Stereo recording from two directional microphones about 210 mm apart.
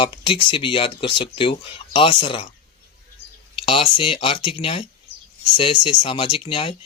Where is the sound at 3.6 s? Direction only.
25° left (ahead or behind).